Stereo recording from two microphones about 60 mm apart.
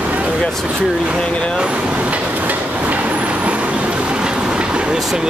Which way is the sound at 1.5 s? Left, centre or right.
Centre.